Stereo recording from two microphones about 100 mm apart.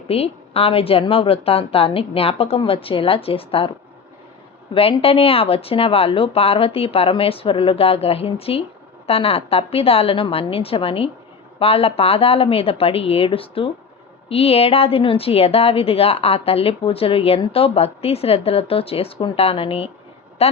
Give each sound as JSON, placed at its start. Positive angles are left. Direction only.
{"t": 0.1, "sound": "a woman's voice", "side_deg": 75}
{"t": 4.7, "sound": "a woman's voice", "side_deg": 65}
{"t": 20.4, "sound": "a woman's voice", "side_deg": 85}